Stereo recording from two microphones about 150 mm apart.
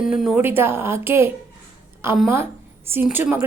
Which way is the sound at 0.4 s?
15° right (ahead or behind).